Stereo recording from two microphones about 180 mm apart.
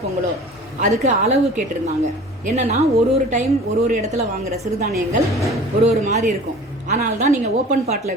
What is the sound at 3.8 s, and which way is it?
Speech, 40° right (ahead or behind).